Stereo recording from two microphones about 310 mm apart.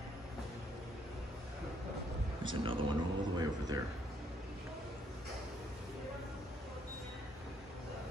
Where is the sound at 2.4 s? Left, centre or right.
Centre.